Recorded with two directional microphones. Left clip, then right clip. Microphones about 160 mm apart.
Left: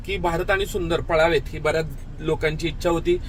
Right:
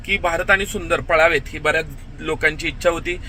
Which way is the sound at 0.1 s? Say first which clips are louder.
Right 5 dB; 10° left (ahead or behind).